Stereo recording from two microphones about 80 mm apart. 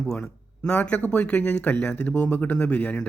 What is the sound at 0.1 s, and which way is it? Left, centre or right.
Speech, centre.